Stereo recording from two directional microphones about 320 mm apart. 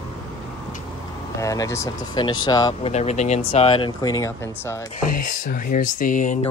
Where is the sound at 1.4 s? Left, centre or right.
Centre.